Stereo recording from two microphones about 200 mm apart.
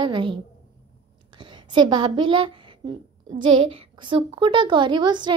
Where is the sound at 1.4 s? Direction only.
20° right (ahead or behind).